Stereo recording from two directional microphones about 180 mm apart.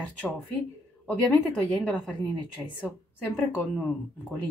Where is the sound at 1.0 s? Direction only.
10° left (ahead or behind).